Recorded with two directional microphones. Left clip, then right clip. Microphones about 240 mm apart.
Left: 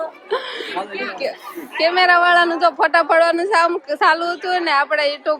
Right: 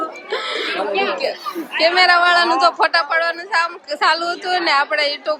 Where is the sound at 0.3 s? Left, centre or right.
Centre.